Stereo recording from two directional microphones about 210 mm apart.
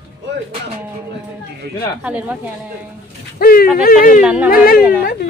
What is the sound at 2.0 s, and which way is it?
Speech, 5° right (ahead or behind).